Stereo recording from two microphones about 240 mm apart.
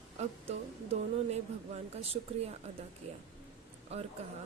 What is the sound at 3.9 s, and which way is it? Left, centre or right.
Speech, right.